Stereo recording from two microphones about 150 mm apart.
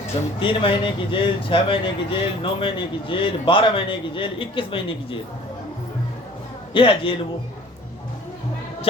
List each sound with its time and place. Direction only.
0.3 s speech: 35° left (ahead or behind)
6.7 s speech: 35° left (ahead or behind)